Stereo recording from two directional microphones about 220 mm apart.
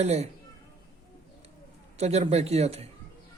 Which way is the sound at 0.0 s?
30° right (ahead or behind).